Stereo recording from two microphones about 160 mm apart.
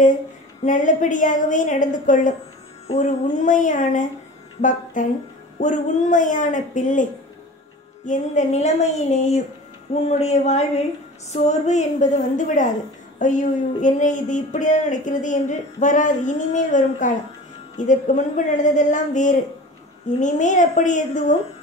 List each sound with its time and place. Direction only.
0.7 s speech: 50° left (ahead or behind)
8.1 s speech: 45° left (ahead or behind)